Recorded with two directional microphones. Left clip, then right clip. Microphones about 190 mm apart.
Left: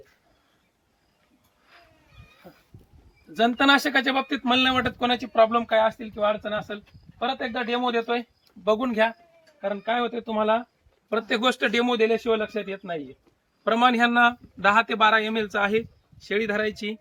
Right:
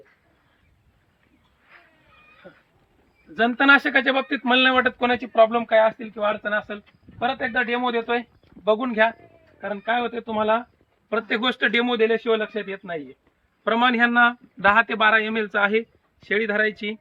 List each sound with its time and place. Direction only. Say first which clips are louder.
3.3 s speech: right 3 dB; 30° left (ahead or behind)